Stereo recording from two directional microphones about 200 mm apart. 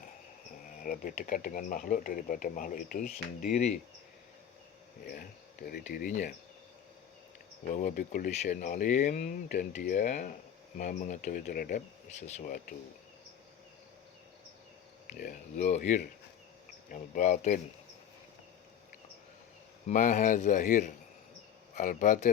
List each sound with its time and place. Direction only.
0.8 s speech: 45° left (ahead or behind)
5.0 s speech: 45° left (ahead or behind)
7.7 s speech: 40° left (ahead or behind)
15.0 s speech: 45° left (ahead or behind)
19.9 s speech: 40° left (ahead or behind)